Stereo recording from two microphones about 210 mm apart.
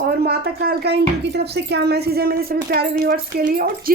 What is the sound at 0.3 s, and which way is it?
Speech, 50° right (ahead or behind).